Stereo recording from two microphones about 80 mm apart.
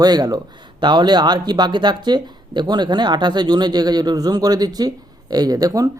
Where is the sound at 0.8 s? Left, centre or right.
Right.